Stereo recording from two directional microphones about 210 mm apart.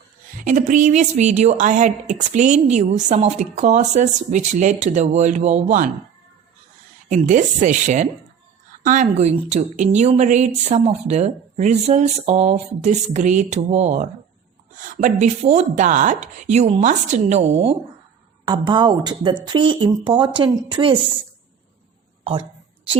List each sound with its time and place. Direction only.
0.7 s a woman's voice: 35° right (ahead or behind)
7.1 s a woman's voice: 35° right (ahead or behind); by 21.0 s 20° right (ahead or behind)
22.2 s speech: 25° right (ahead or behind)